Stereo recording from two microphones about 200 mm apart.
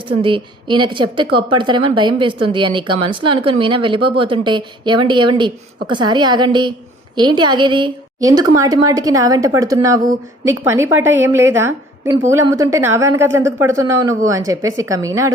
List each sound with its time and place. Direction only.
0.1 s a woman's voice: 25° right (ahead or behind)